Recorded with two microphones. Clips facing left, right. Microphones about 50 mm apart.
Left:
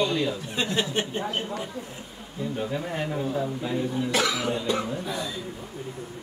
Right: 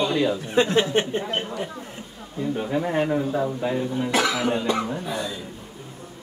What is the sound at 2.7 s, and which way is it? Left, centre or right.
Speech, right.